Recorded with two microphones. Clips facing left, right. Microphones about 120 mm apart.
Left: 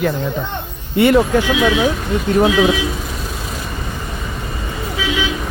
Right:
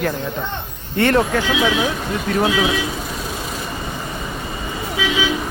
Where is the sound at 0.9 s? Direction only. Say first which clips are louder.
Left 4 dB; 10° left (ahead or behind).